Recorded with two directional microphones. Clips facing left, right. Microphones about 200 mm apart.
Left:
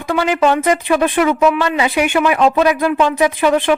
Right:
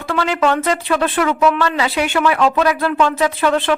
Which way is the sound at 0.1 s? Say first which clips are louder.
Left 3 dB; 15° left (ahead or behind).